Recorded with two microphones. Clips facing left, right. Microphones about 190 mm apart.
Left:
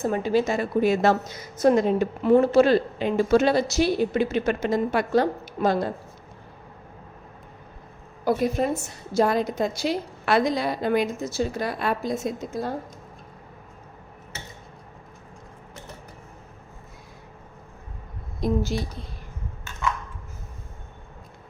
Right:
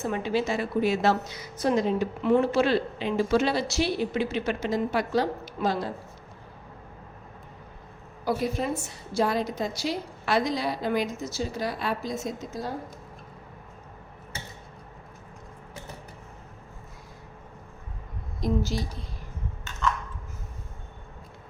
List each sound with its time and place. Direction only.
0.0 s speech: 40° left (ahead or behind)
2.3 s speech: 40° left (ahead or behind)
8.2 s a woman's voice: 45° left (ahead or behind)
18.3 s speech: 55° left (ahead or behind)